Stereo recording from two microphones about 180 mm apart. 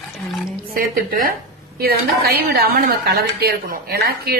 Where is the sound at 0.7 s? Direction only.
55° right (ahead or behind).